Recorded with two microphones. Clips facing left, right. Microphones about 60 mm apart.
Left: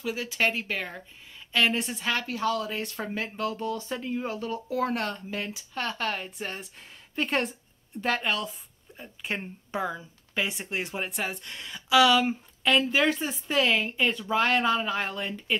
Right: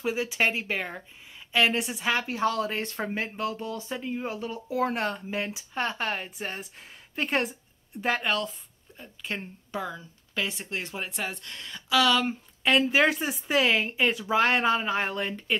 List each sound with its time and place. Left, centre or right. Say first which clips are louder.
0.0 s speech: right 1 dB; right
2.3 s a woman's voice: right 1 dB; right; by 8.5 s centre
8.9 s speech: left 2 dB; centre
12.6 s speech: right 1 dB; centre
15.1 s a woman's voice: right 2 dB; centre